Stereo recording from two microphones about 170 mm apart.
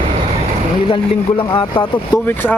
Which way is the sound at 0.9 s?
30° left (ahead or behind).